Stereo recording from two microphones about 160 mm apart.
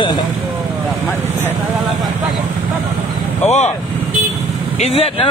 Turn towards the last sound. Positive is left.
turn(degrees=40)  # may be behind; listen again after turning